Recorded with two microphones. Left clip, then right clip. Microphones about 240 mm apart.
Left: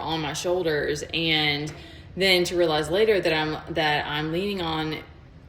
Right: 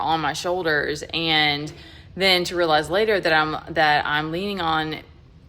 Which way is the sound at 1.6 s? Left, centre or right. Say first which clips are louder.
Right 1 dB; centre.